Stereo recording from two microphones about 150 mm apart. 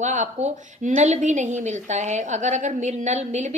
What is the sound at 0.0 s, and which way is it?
A woman's voice, 55° right (ahead or behind).